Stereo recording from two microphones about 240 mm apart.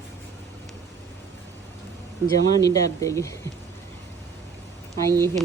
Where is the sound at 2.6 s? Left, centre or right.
Centre.